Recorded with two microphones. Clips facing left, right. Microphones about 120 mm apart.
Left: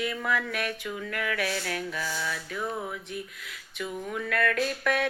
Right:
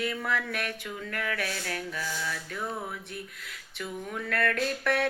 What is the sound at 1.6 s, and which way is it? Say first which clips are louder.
Mantra: left 2 dB; 25° left (ahead or behind).